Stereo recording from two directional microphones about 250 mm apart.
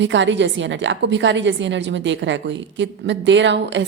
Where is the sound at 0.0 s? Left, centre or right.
Right.